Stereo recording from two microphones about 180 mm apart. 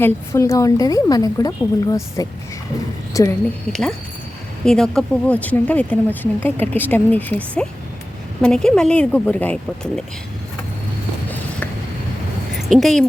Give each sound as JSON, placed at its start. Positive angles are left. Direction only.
{"t": 0.0, "sound": "a woman's voice", "side_deg": 15}
{"t": 3.7, "sound": "speech", "side_deg": 5}
{"t": 12.6, "sound": "speech", "side_deg": 0}